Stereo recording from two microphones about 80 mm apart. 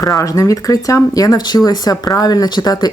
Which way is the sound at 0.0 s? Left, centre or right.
Left.